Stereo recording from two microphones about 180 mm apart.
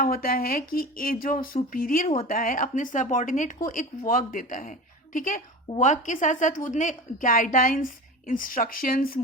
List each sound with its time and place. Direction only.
0.0 s a woman's voice: 55° left (ahead or behind)